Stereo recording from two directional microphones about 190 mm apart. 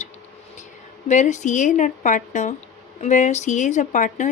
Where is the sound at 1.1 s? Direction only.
40° left (ahead or behind).